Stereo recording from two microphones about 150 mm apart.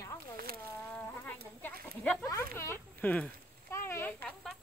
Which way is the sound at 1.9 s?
10° left (ahead or behind).